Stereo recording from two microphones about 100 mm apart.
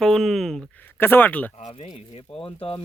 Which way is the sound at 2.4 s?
65° left (ahead or behind).